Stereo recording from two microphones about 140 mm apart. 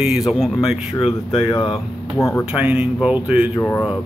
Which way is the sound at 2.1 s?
20° left (ahead or behind).